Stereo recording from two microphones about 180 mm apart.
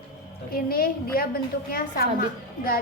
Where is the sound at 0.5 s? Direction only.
55° left (ahead or behind).